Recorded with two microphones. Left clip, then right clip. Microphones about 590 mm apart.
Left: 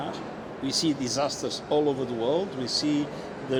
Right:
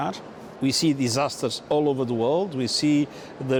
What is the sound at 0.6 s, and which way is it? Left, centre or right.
Speech, right.